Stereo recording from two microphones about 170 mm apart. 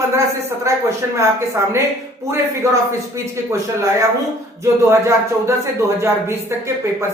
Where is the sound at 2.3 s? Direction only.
15° right (ahead or behind).